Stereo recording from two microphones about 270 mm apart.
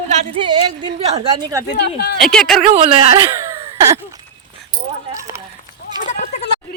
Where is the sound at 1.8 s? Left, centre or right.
Left.